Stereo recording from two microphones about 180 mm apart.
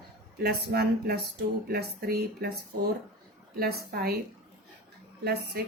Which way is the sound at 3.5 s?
60° right (ahead or behind).